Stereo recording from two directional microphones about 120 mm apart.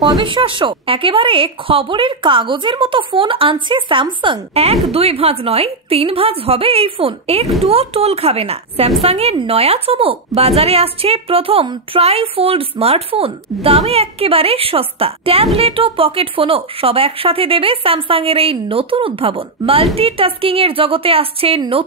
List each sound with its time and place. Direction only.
0.0 s speech: 40° right (ahead or behind)
4.9 s a woman's voice: 55° right (ahead or behind)
11.6 s a woman's voice: 40° right (ahead or behind)
12.0 s speech: 55° right (ahead or behind)